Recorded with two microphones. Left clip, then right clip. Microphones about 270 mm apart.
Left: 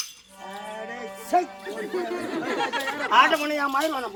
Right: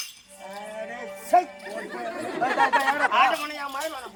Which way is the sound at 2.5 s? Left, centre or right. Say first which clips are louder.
Right 8 dB; centre.